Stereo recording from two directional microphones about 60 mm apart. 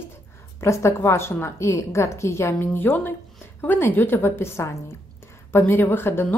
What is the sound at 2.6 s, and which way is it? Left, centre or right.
Speech, left.